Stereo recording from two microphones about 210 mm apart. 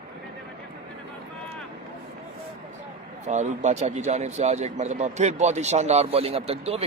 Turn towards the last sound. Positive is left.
turn(degrees=-30)  # may be behind; listen again after turning